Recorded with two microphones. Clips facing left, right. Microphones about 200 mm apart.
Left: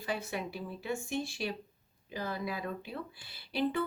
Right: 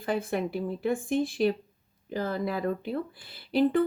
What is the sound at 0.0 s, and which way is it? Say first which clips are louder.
Speech: right 8 dB; 55° right (ahead or behind).